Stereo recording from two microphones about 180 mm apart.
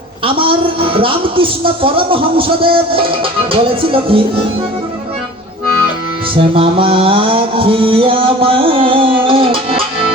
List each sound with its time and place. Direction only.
0.3 s speech: 30° right (ahead or behind)
6.3 s music: 30° right (ahead or behind)